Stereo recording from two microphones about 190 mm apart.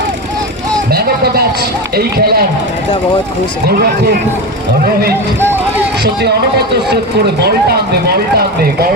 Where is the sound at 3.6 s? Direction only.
55° right (ahead or behind).